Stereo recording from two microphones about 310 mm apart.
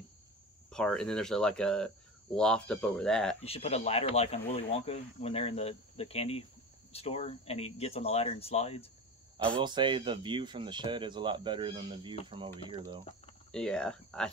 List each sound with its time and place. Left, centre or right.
0.7 s speech: centre
3.4 s speech: centre
9.6 s speech: centre
13.5 s speech: centre